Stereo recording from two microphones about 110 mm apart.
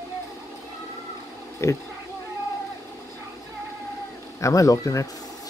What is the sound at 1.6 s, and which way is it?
Speech, 25° left (ahead or behind).